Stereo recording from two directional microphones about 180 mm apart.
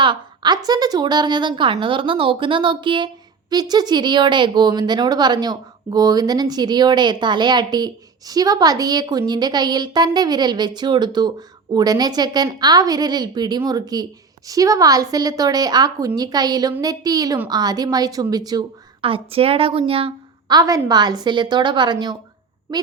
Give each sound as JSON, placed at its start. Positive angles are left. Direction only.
{"t": 0.0, "sound": "a woman's voice", "side_deg": -25}